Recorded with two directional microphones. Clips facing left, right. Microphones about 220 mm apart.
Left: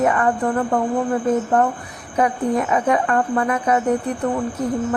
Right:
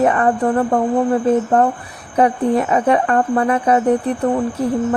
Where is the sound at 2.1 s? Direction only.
30° right (ahead or behind).